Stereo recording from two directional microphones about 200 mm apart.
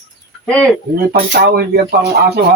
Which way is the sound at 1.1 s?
50° right (ahead or behind).